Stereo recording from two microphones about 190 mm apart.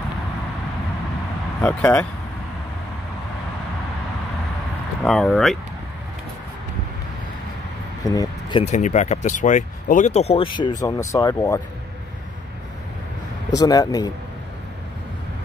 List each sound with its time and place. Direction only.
1.6 s speech: 5° left (ahead or behind)
5.0 s speech: centre (ahead or behind)
8.1 s speech: 20° left (ahead or behind)
8.6 s speech: 40° left (ahead or behind); by 11.6 s 15° left (ahead or behind)
13.6 s speech: 20° left (ahead or behind)